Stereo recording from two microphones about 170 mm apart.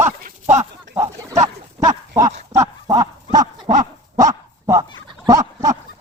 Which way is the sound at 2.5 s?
20° right (ahead or behind).